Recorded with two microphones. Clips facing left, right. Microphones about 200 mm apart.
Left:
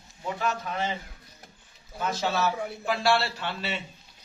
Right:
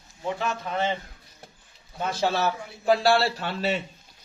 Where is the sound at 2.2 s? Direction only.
30° right (ahead or behind).